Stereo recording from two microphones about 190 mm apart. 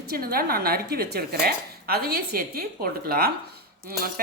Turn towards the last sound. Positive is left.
turn(degrees=-50)  # may be behind; listen again after turning